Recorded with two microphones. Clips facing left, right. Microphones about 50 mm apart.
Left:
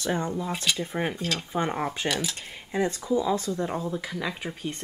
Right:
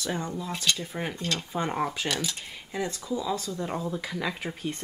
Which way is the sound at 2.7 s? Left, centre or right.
Left.